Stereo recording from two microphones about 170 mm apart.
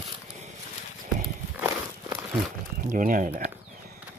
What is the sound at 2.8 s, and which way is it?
Speech, 50° right (ahead or behind).